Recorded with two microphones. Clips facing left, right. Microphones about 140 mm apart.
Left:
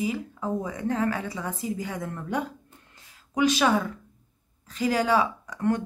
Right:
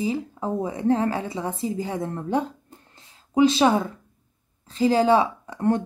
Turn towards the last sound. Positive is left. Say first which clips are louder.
# right 3 dB
turn(degrees=-30)  # may be behind; listen again after turning